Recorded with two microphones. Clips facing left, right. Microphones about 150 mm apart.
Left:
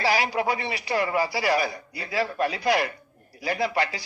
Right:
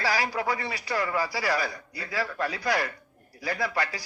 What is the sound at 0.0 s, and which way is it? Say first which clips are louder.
A man's voice: left 4 dB; 25° left (ahead or behind).